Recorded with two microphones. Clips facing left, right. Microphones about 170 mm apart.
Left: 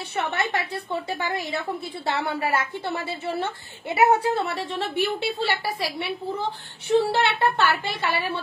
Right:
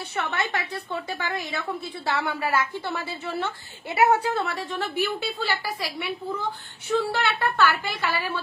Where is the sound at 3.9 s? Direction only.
25° left (ahead or behind).